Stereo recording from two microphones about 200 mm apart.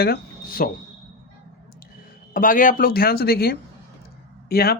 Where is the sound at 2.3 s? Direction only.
45° left (ahead or behind).